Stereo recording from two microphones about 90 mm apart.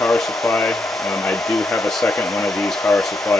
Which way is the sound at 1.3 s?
15° left (ahead or behind).